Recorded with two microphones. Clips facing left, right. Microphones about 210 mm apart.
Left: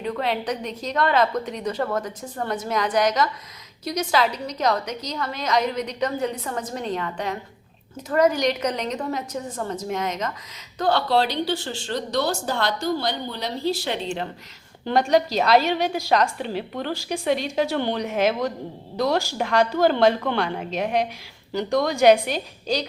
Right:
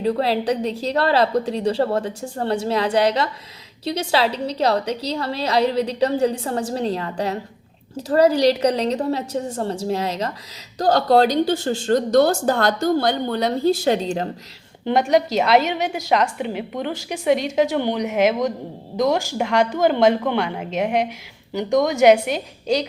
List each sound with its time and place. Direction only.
0.0 s a woman's voice: 35° right (ahead or behind)
14.8 s a woman's voice: 20° right (ahead or behind)